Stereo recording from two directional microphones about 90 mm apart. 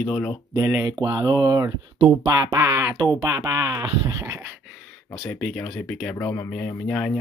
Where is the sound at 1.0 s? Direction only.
45° right (ahead or behind).